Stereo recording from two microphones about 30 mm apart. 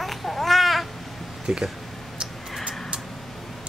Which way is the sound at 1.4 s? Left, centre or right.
Right.